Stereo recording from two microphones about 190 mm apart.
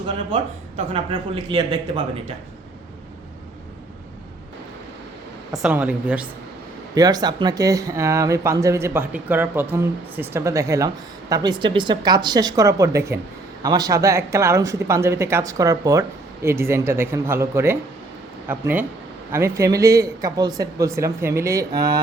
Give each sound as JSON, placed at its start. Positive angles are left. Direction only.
{"t": 0.8, "sound": "speech", "side_deg": -30}
{"t": 5.5, "sound": "speech", "side_deg": -5}
{"t": 6.9, "sound": "speech", "side_deg": -20}